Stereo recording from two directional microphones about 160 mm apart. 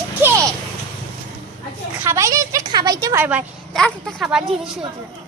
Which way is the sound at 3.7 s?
5° left (ahead or behind).